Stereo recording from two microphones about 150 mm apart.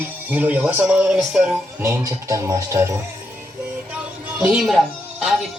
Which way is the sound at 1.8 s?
20° right (ahead or behind).